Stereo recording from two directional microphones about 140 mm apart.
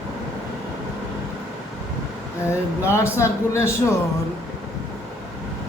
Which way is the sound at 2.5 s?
20° left (ahead or behind).